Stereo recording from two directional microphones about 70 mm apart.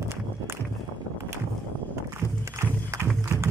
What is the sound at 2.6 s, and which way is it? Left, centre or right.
Music, right.